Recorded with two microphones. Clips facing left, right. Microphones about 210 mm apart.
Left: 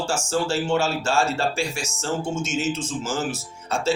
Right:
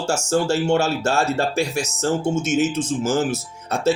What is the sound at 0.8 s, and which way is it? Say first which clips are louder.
Speech: right 2 dB; 65° right (ahead or behind).